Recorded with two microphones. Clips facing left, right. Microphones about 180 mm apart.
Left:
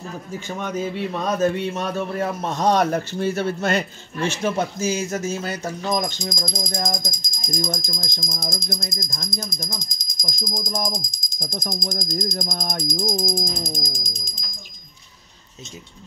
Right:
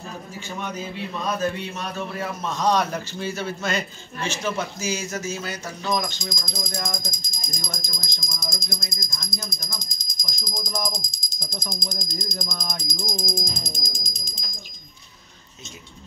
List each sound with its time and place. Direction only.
0.6 s speech: 50° left (ahead or behind)
6.8 s music: 40° left (ahead or behind)
7.4 s speech: 40° left (ahead or behind)
13.2 s music: 35° left (ahead or behind)
13.7 s music: 15° left (ahead or behind)